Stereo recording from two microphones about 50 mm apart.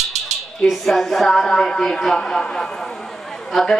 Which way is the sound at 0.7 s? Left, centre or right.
Centre.